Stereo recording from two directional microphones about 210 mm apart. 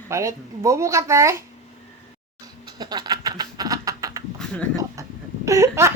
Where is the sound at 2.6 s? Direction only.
20° right (ahead or behind).